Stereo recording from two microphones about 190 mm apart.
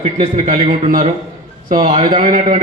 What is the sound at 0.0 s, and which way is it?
A man's voice, 35° right (ahead or behind).